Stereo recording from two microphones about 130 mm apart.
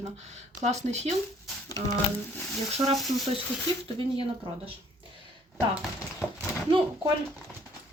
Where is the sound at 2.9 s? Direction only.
Centre (ahead or behind).